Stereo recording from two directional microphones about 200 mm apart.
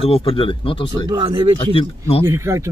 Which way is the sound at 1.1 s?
20° right (ahead or behind).